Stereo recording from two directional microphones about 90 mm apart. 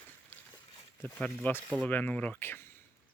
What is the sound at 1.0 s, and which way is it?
Speech, 20° left (ahead or behind).